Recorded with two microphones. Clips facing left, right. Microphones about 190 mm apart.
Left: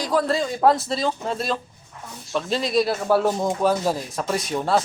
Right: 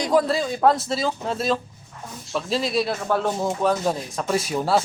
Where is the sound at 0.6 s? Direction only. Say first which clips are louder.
Left 1 dB; centre (ahead or behind).